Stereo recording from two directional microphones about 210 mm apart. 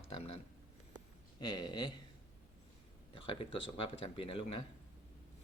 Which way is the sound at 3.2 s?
25° left (ahead or behind).